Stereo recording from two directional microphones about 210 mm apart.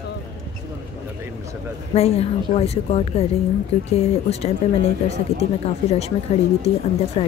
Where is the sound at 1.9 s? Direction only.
30° left (ahead or behind).